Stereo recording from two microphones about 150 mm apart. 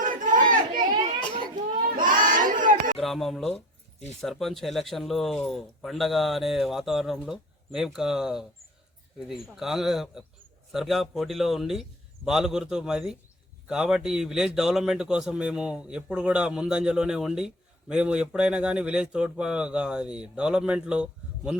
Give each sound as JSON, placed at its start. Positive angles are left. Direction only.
{"t": 0.0, "sound": "chatter", "side_deg": -60}
{"t": 2.0, "sound": "crowd", "side_deg": -65}
{"t": 3.0, "sound": "a man's voice", "side_deg": 0}